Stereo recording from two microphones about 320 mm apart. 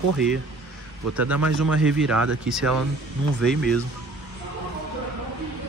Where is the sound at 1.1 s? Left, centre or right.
Right.